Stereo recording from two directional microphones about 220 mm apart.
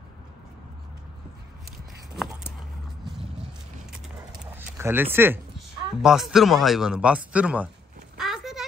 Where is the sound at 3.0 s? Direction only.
Centre (ahead or behind).